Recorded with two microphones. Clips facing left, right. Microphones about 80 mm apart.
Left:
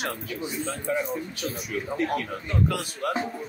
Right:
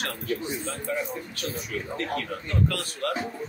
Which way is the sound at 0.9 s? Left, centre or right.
Centre.